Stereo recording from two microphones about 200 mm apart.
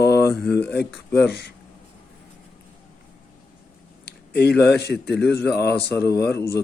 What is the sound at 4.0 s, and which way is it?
Speech, 55° left (ahead or behind).